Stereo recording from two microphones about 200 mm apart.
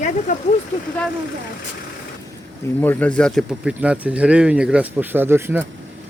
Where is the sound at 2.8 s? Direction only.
10° left (ahead or behind); by 5.6 s 10° right (ahead or behind).